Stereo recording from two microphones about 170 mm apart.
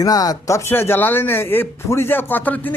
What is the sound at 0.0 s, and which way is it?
Speech, 20° left (ahead or behind).